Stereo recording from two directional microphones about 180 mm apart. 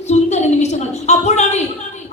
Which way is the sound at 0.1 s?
40° left (ahead or behind).